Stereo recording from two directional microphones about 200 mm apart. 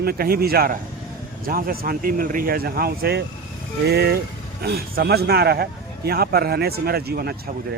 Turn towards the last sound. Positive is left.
turn(degrees=-50)  # may be behind; listen again after turning